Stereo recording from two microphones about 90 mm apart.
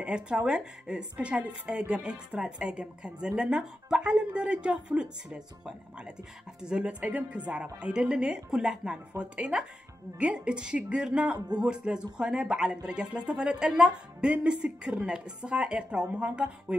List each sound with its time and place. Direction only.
0.0 s a woman's voice: 10° right (ahead or behind)
6.6 s a woman's voice: 10° right (ahead or behind)
11.3 s speech: 50° right (ahead or behind)
11.6 s a woman's voice: 10° right (ahead or behind)